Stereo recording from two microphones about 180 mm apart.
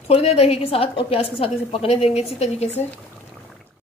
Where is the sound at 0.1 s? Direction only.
35° left (ahead or behind).